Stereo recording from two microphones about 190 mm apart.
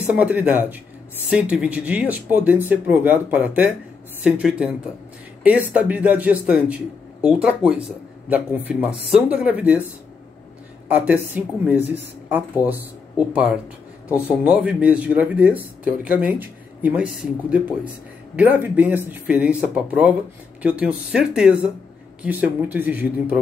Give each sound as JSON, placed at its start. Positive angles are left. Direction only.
{"t": 0.1, "sound": "speech", "side_deg": -5}
{"t": 10.9, "sound": "speech", "side_deg": -5}